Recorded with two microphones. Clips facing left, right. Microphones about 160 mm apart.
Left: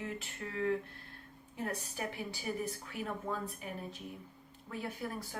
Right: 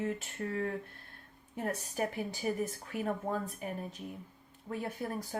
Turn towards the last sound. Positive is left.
turn(degrees=-40)  # may be behind; listen again after turning